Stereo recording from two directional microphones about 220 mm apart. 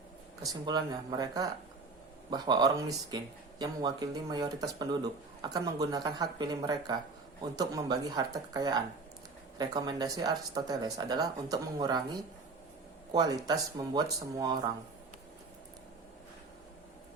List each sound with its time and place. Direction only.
0.4 s speech: 20° right (ahead or behind)
13.1 s speech: 15° right (ahead or behind)